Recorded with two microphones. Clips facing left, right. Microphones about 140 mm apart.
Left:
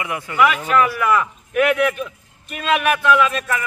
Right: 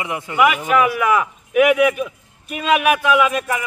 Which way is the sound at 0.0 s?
20° right (ahead or behind).